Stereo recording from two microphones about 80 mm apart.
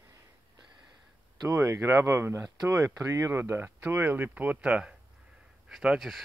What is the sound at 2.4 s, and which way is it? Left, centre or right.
Speech, right.